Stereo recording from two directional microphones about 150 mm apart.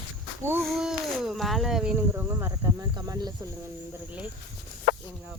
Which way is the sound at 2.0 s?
15° right (ahead or behind).